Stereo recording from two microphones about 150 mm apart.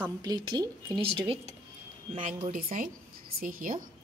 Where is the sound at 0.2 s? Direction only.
25° right (ahead or behind).